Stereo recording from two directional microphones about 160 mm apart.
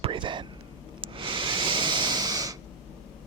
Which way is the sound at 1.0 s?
30° right (ahead or behind).